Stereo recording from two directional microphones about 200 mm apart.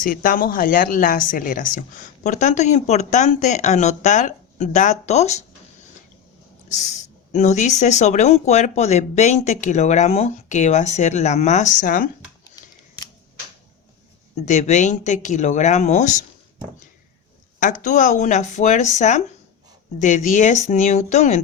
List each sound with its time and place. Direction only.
0.0 s speech: 45° left (ahead or behind)
6.9 s speech: 35° left (ahead or behind)
12.5 s scissors: 20° left (ahead or behind)
14.3 s speech: 35° left (ahead or behind)
17.6 s speech: 40° left (ahead or behind)